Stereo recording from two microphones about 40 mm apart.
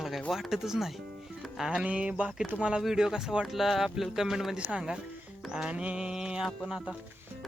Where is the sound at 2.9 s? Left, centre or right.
Centre.